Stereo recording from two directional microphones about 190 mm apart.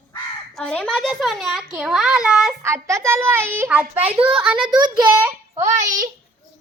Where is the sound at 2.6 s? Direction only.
15° right (ahead or behind).